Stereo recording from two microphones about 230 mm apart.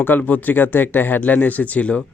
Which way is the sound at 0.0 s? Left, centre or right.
Centre.